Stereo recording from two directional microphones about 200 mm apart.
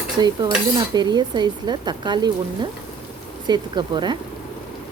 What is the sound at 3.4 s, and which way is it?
Stir, 20° right (ahead or behind).